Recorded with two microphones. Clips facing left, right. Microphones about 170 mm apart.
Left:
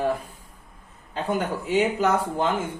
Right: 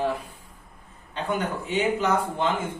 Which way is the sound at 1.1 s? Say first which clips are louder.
Left 2 dB; 40° left (ahead or behind).